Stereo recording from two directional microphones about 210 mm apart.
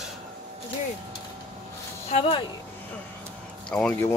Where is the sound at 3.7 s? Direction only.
5° left (ahead or behind).